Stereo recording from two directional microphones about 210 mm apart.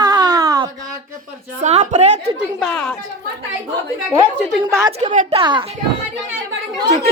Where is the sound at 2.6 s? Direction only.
5° left (ahead or behind).